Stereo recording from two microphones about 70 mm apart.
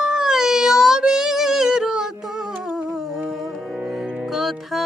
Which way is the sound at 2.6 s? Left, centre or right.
Centre.